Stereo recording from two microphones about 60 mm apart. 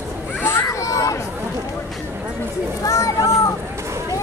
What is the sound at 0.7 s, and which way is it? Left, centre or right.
Speech, left.